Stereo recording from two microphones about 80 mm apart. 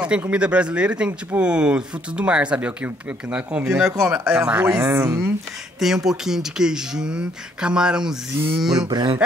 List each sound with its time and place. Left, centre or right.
0.3 s speech: centre
4.6 s speech: right
5.8 s speech: centre
8.8 s speech: right